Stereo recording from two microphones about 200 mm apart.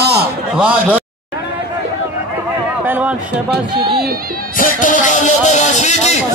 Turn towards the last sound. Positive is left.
turn(degrees=35)  # may be behind; listen again after turning